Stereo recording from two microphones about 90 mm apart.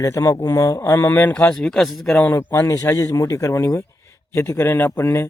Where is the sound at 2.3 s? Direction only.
25° left (ahead or behind).